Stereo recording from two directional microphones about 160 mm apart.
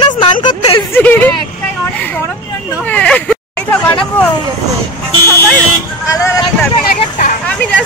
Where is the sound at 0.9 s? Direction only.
10° left (ahead or behind).